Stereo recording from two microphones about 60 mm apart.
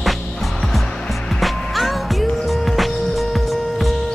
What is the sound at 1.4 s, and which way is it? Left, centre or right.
Music, centre.